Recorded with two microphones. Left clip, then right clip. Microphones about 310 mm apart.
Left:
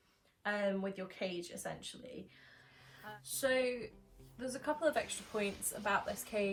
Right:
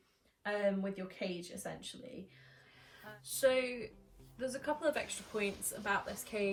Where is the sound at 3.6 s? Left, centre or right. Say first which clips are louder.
Left 1 dB; centre.